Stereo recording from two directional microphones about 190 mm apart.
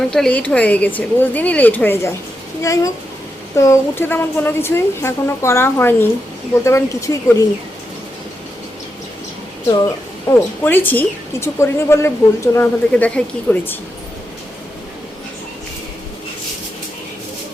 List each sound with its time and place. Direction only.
0.1 s a woman's voice: 5° left (ahead or behind)
10.2 s a woman's voice: 10° left (ahead or behind)